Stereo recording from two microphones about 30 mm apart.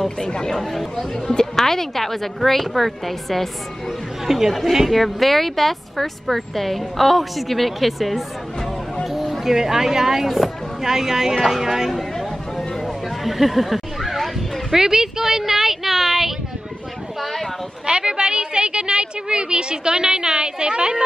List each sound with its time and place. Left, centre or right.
0.2 s speech: left
1.6 s a woman's voice: centre
4.3 s speech: centre
4.8 s a woman's voice: centre
9.1 s a sound: centre
9.5 s speech: centre
11.9 s chatter: centre
14.7 s a sound: centre
17.2 s a sound: centre
17.8 s a woman's voice: right